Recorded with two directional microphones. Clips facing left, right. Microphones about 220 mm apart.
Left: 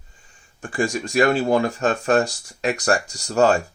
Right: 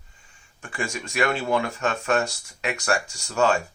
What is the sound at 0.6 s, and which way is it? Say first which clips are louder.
Speech: left 8 dB; 35° left (ahead or behind).